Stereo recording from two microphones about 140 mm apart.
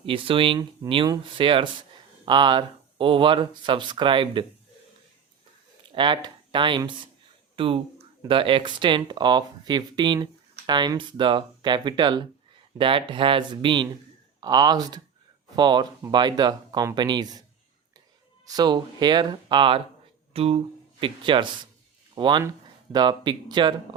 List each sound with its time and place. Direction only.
0.0 s speech: 40° right (ahead or behind)
5.9 s speech: 35° right (ahead or behind)
18.4 s speech: 30° right (ahead or behind)